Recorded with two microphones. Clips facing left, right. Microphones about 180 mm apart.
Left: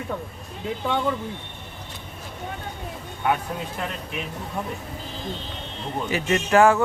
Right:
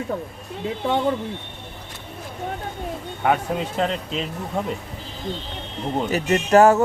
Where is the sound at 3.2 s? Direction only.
70° right (ahead or behind).